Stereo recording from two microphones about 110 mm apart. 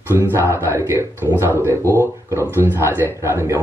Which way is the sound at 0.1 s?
20° right (ahead or behind).